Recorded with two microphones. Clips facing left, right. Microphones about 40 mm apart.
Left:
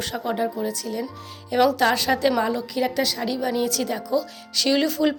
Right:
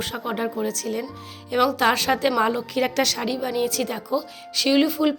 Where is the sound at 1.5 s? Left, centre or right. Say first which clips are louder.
Left 1 dB; right.